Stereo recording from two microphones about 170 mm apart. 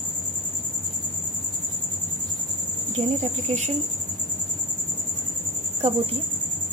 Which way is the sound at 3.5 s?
45° right (ahead or behind).